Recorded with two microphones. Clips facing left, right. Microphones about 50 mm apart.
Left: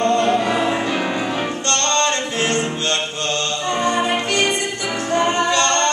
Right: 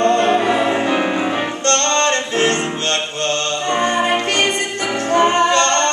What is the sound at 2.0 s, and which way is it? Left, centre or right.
Music, right.